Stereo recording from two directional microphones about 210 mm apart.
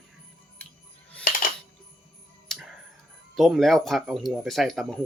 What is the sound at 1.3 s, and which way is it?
Music, 45° left (ahead or behind).